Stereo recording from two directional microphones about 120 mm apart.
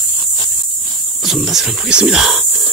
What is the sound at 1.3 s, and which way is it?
Speech, centre (ahead or behind).